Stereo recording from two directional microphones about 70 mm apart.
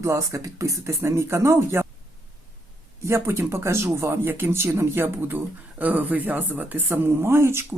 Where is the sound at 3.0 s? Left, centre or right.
Right.